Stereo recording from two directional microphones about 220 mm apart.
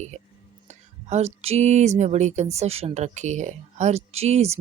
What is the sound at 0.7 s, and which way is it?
Whispering, 30° right (ahead or behind).